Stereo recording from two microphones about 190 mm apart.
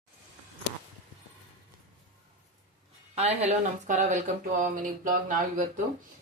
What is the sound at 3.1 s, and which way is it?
Speech, 35° right (ahead or behind).